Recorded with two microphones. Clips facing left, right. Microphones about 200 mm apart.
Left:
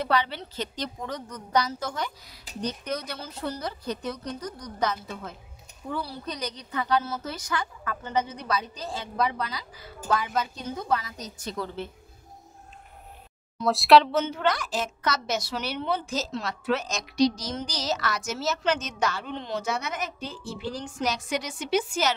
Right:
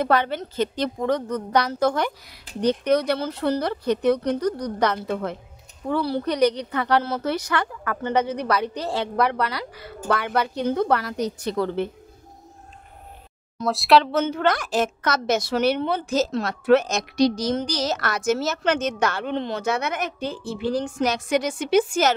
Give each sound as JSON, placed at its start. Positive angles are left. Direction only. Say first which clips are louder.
{"t": 0.0, "sound": "a woman's voice", "louder": "right 5 dB", "side_deg": -50}
{"t": 13.7, "sound": "speech", "louder": "even", "side_deg": 0}
{"t": 14.1, "sound": "a woman's voice", "louder": "right 4 dB", "side_deg": -50}